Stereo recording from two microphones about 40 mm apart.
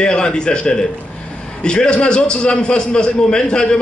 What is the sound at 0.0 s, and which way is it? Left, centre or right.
A man's voice, left.